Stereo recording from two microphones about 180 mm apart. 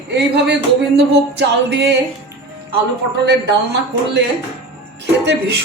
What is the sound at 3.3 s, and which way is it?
Speech, 70° right (ahead or behind).